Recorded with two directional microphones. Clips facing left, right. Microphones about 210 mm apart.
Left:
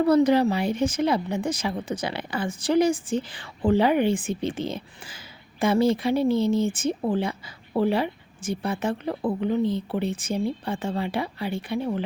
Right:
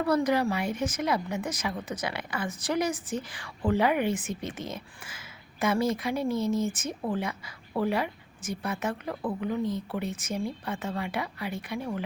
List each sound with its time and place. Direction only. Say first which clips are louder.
0.0 s a woman's voice: left 7 dB; 25° left (ahead or behind)